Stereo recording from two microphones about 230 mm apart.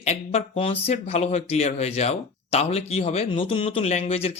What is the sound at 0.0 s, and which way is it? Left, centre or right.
Speech, left.